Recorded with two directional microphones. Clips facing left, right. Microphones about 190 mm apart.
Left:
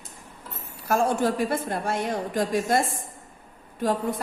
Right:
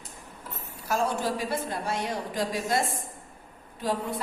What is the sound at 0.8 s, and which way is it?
A woman's voice, 55° left (ahead or behind).